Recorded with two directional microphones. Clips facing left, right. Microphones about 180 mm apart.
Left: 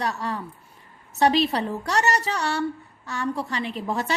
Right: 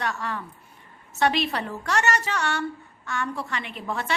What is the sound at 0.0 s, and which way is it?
A woman's voice, 35° left (ahead or behind).